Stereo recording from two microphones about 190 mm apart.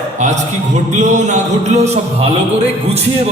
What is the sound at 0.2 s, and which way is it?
Music, 40° right (ahead or behind).